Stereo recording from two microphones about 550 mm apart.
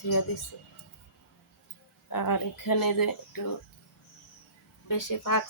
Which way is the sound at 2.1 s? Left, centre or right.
Left.